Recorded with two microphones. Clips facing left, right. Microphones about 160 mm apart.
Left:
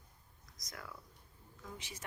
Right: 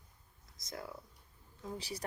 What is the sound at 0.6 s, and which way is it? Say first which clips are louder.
Speech: right 6 dB; 25° right (ahead or behind).